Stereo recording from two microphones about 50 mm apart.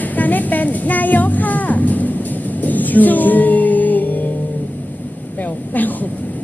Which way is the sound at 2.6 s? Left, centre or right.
Left.